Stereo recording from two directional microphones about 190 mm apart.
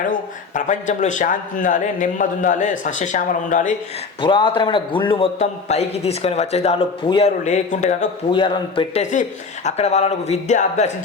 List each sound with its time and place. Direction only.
0.1 s a man's voice: 40° left (ahead or behind)
4.2 s a man's voice: 25° left (ahead or behind)
8.3 s a man's voice: 25° left (ahead or behind)